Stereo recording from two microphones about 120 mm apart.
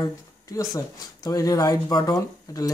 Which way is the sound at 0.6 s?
30° left (ahead or behind).